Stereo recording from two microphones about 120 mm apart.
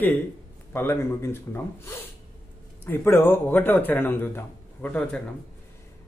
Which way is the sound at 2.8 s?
20° left (ahead or behind).